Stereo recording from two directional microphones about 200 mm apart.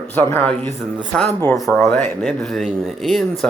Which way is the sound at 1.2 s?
10° left (ahead or behind).